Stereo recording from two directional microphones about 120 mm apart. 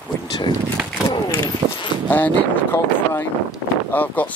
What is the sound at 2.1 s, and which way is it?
Speech, 15° left (ahead or behind).